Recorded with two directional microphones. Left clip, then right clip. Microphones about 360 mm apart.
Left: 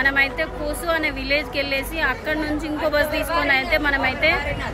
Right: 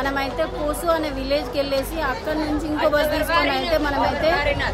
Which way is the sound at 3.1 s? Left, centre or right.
Right.